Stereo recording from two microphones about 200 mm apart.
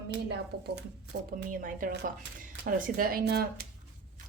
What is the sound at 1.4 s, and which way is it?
A woman's voice, 45° right (ahead or behind).